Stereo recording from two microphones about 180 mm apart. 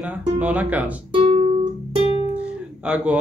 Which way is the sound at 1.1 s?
30° right (ahead or behind).